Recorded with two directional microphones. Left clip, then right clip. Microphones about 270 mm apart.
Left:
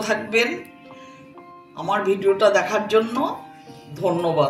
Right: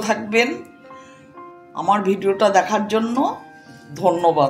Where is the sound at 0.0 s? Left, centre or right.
Right.